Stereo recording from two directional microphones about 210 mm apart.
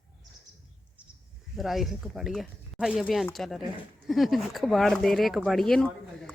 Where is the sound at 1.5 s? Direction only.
Centre (ahead or behind).